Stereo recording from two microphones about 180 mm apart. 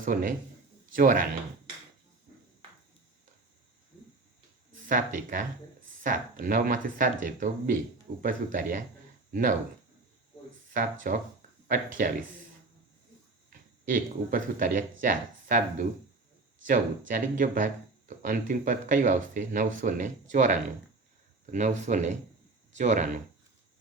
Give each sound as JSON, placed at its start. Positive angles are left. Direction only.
{"t": 0.0, "sound": "speech", "side_deg": -50}
{"t": 4.9, "sound": "speech", "side_deg": -50}
{"t": 10.8, "sound": "speech", "side_deg": -50}
{"t": 13.8, "sound": "speech", "side_deg": -50}